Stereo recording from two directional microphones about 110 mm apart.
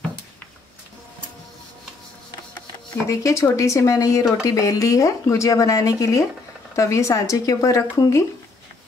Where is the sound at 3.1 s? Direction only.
30° left (ahead or behind).